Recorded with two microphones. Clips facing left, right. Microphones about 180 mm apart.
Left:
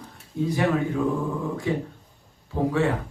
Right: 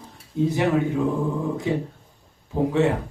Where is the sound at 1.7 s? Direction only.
20° right (ahead or behind).